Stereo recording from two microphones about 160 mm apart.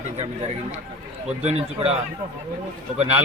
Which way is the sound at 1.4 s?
40° right (ahead or behind).